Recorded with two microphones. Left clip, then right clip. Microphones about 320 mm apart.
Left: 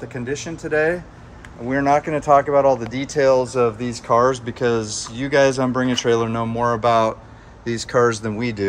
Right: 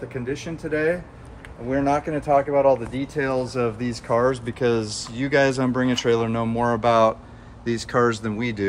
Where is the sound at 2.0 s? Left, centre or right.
Left.